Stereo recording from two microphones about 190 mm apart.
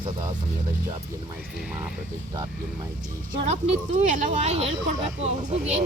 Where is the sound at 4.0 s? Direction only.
40° right (ahead or behind).